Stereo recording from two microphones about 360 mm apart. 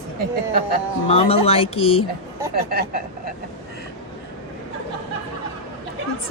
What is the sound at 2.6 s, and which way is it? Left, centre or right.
Speech, right.